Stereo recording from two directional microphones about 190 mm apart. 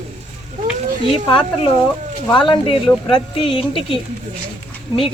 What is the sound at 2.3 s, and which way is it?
Speech, 25° left (ahead or behind).